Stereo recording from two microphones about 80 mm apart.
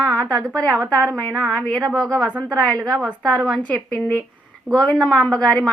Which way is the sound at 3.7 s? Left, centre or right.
Centre.